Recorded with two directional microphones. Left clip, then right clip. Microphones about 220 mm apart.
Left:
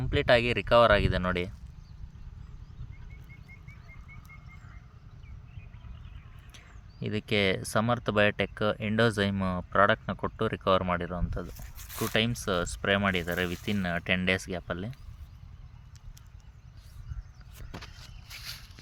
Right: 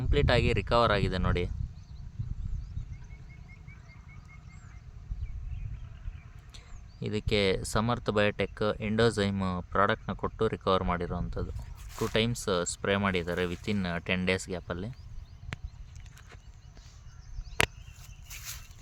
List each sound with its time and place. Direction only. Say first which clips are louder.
0.0 s speech: left 3 dB; centre (ahead or behind)
7.0 s speech: left 1 dB; centre (ahead or behind)
11.8 s zipper: even; 30° left (ahead or behind)
12.1 s speech: left 1 dB; centre (ahead or behind)
18.3 s a sound: left 2 dB; 20° left (ahead or behind)